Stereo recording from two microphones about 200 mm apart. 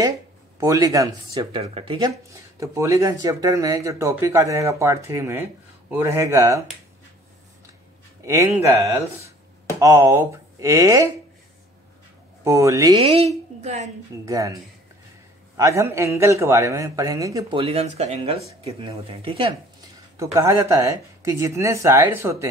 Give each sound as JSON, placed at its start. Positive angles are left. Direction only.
{"t": 0.6, "sound": "speech", "side_deg": -15}
{"t": 8.3, "sound": "speech", "side_deg": -15}
{"t": 12.4, "sound": "a woman's voice", "side_deg": -15}
{"t": 14.2, "sound": "speech", "side_deg": -15}
{"t": 20.2, "sound": "speech", "side_deg": -15}